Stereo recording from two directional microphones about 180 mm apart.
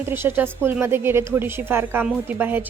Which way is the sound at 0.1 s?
10° right (ahead or behind).